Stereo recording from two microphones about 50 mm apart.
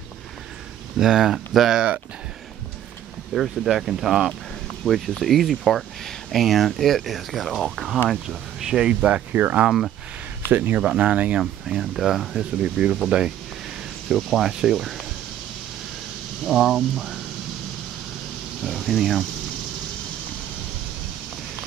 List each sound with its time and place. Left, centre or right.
0.9 s speech: centre
3.3 s speech: centre
9.3 s speech: right
10.8 s speech: right
11.6 s speech: centre
12.6 s speech: right
14.0 s speech: centre
16.4 s speech: centre
18.6 s speech: centre